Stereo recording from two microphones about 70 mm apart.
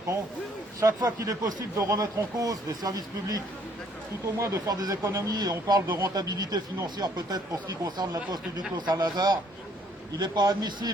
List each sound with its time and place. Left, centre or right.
0.8 s speech: right
4.4 s speech: right
4.7 s speech: right
5.0 s speech: right
5.3 s a man's voice: right